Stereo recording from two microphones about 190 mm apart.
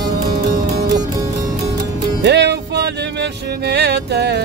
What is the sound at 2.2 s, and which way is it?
Music, 65° right (ahead or behind).